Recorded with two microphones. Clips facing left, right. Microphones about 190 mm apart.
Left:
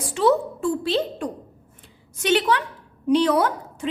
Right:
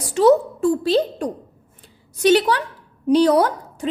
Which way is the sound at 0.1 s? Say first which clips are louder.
Right 5 dB; 40° right (ahead or behind).